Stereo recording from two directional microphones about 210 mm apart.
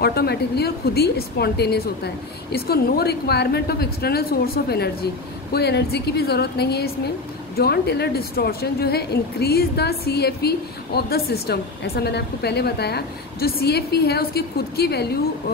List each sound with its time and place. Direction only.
0.0 s speech: 50° left (ahead or behind)